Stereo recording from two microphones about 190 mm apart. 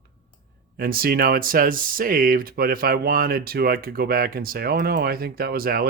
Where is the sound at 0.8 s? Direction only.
50° right (ahead or behind).